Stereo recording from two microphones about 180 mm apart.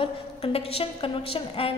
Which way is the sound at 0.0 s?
35° left (ahead or behind).